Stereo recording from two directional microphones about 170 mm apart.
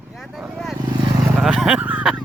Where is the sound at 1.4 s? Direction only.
5° right (ahead or behind).